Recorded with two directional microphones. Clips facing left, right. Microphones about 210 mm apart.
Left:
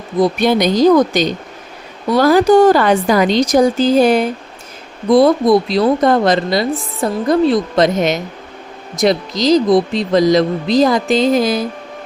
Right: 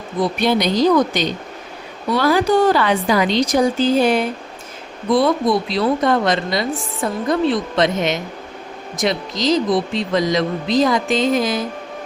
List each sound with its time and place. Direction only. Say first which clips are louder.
0.2 s a woman's voice: left 5 dB; 45° left (ahead or behind)